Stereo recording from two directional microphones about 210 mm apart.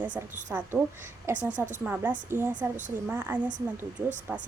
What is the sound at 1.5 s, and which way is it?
Speech, 35° right (ahead or behind).